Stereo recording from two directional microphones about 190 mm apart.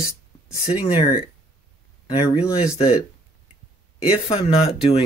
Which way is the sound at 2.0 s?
25° left (ahead or behind).